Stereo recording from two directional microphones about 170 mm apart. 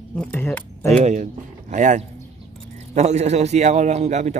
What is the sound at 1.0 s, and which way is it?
A man's voice, 45° right (ahead or behind).